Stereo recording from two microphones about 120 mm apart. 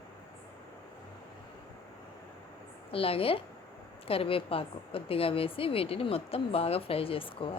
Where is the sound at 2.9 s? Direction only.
50° left (ahead or behind).